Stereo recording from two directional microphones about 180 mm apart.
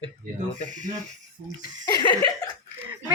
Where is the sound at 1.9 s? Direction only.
25° left (ahead or behind).